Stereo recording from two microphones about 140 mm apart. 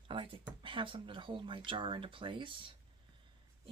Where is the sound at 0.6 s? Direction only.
40° right (ahead or behind).